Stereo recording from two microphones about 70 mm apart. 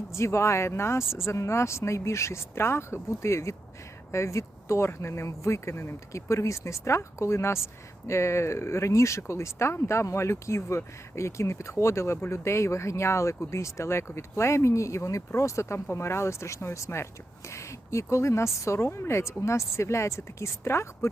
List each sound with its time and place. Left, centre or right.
0.1 s speech: left